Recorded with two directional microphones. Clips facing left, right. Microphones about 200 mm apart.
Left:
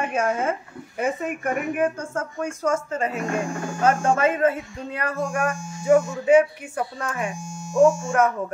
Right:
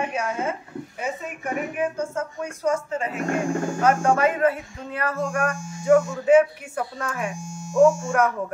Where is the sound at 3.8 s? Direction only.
25° left (ahead or behind).